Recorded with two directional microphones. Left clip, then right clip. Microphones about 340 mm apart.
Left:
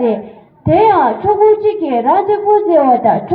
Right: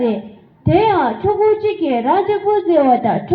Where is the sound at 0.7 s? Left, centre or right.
Left.